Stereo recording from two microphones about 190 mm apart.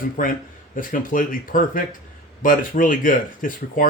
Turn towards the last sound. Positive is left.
turn(degrees=45)  # may be behind; listen again after turning